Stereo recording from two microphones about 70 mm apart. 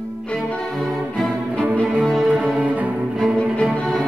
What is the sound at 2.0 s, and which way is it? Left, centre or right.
Music, centre.